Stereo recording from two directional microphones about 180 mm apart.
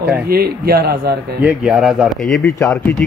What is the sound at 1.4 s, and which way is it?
Speech, 5° right (ahead or behind).